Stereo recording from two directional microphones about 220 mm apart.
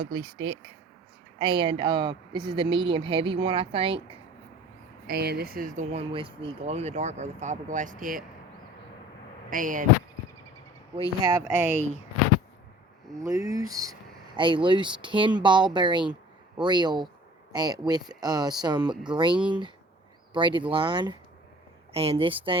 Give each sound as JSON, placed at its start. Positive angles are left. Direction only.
{"t": 0.0, "sound": "speech", "side_deg": -20}
{"t": 5.0, "sound": "speech", "side_deg": -45}
{"t": 9.5, "sound": "speech", "side_deg": -35}
{"t": 11.2, "sound": "speech", "side_deg": -10}
{"t": 13.2, "sound": "speech", "side_deg": -15}